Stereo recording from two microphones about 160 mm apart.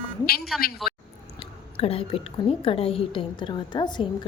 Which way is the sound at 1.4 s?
35° left (ahead or behind).